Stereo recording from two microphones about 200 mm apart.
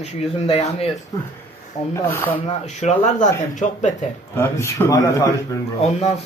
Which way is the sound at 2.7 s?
35° left (ahead or behind).